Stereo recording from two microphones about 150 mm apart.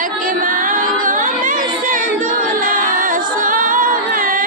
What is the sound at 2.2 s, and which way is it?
A capella, 65° right (ahead or behind).